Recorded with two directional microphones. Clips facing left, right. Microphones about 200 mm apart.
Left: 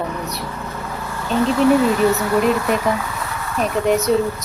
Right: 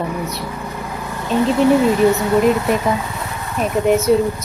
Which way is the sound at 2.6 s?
25° right (ahead or behind).